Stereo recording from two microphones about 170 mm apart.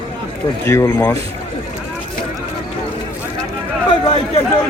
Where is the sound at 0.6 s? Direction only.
20° left (ahead or behind).